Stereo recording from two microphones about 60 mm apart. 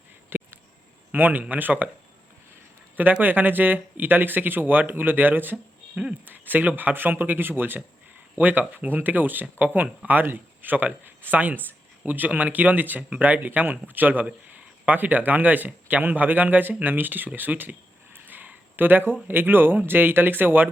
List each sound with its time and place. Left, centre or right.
0.3 s a sound: right
1.1 s speech: right
3.0 s speech: right
5.9 s speech: centre
6.2 s speech: right